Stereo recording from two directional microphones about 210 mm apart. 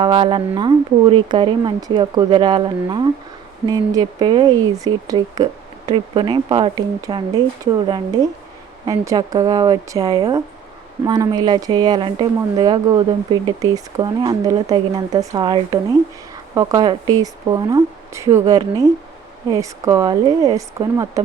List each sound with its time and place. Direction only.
0.0 s a woman's voice: 25° right (ahead or behind)